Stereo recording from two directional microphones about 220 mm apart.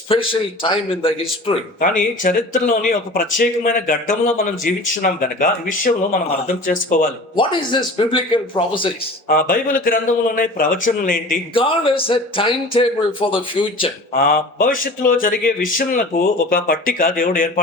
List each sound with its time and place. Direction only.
0.1 s speech: 25° left (ahead or behind)
1.8 s speech: 40° left (ahead or behind)
7.3 s speech: 20° left (ahead or behind)
9.3 s speech: 40° left (ahead or behind)
11.5 s speech: 25° left (ahead or behind)
14.2 s speech: 40° left (ahead or behind)